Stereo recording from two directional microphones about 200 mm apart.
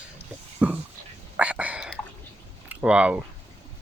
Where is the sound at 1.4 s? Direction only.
5° right (ahead or behind).